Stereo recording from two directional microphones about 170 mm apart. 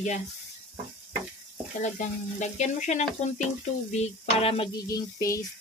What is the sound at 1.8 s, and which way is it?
Speech, 45° left (ahead or behind).